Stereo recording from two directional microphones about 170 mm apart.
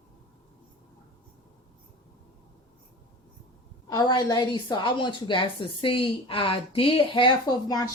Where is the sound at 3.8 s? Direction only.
25° left (ahead or behind).